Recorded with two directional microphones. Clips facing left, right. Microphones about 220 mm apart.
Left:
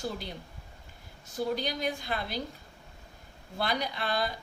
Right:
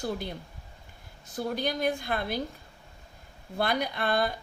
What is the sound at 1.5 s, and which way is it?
Speech, 50° right (ahead or behind).